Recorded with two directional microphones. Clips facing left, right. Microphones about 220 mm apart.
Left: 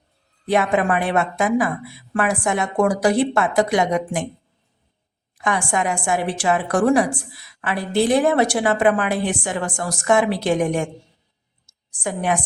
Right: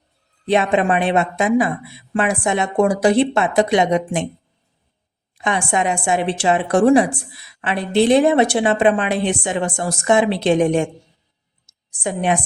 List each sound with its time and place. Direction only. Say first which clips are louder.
0.4 s a woman's voice: right 2 dB; 25° right (ahead or behind)
5.4 s a woman's voice: right 2 dB; 20° right (ahead or behind)
11.6 s a sound: right 2 dB; 20° right (ahead or behind)